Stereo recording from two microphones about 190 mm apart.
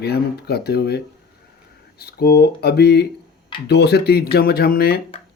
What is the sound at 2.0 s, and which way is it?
Speech, 55° left (ahead or behind).